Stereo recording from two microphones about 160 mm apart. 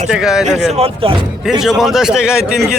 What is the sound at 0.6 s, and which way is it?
Speech, 40° right (ahead or behind).